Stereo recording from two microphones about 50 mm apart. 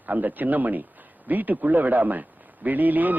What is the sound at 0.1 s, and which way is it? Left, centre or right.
Speech, right.